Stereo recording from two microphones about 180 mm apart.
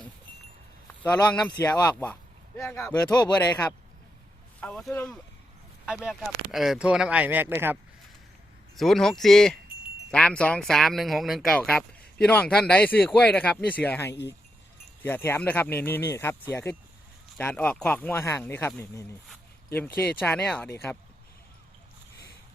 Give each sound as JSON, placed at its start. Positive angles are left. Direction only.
{"t": 1.0, "sound": "speech", "side_deg": 5}
{"t": 1.7, "sound": "speech", "side_deg": 20}
{"t": 4.6, "sound": "speech", "side_deg": 5}
{"t": 5.8, "sound": "speech", "side_deg": -5}
{"t": 8.7, "sound": "speech", "side_deg": 0}